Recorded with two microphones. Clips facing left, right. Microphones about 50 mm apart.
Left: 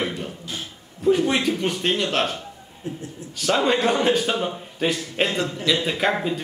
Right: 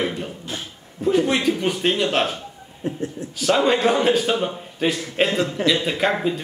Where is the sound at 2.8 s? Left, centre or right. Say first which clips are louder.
Right 6 dB; right.